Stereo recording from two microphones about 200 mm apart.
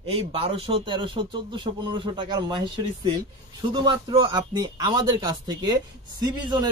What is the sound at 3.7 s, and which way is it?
Speech, 20° right (ahead or behind).